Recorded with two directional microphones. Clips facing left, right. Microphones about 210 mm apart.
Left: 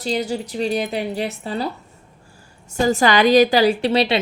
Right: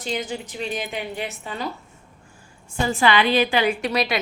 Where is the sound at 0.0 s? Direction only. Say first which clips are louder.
Left 5 dB; 35° left (ahead or behind).